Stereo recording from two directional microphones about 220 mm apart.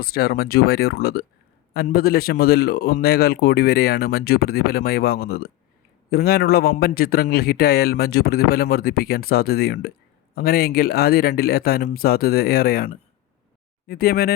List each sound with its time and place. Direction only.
0.0 s a man's voice: 45° left (ahead or behind)